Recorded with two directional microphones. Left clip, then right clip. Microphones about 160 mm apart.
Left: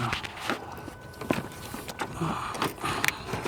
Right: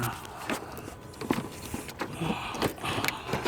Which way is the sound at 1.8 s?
40° left (ahead or behind).